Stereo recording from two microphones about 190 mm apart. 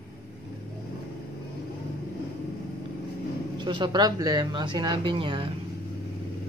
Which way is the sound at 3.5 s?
25° right (ahead or behind).